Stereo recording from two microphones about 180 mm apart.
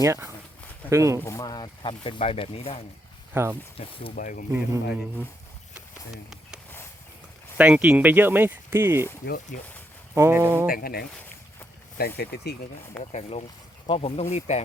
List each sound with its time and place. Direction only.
0.0 s speech: 15° right (ahead or behind)
1.2 s speech: 15° left (ahead or behind); by 2.8 s 30° left (ahead or behind)
3.3 s speech: 10° right (ahead or behind)
3.8 s speech: 35° left (ahead or behind)
4.1 s speech: 45° left (ahead or behind)
4.5 s speech: 10° right (ahead or behind)
7.6 s speech: 5° right (ahead or behind)
10.2 s speech: 15° right (ahead or behind)
10.7 s speech: 55° left (ahead or behind)
13.0 s speech: 35° left (ahead or behind)